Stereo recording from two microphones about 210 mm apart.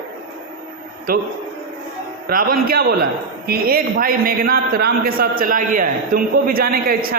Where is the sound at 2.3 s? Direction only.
45° right (ahead or behind).